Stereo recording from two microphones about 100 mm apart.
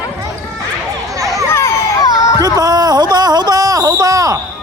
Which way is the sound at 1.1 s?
35° right (ahead or behind).